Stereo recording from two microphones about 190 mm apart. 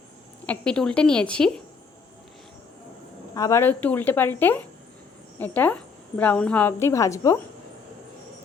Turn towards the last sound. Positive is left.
turn(degrees=15)  # may be behind; listen again after turning